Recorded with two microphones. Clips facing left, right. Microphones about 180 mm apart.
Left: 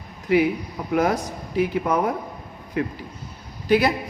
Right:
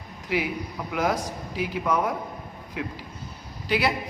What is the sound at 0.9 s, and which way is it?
A man's voice, 55° left (ahead or behind).